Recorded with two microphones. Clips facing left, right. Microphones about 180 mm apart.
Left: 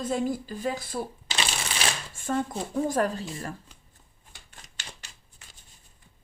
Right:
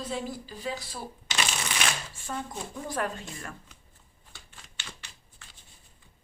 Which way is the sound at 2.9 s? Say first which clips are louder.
Left 6 dB; 35° left (ahead or behind).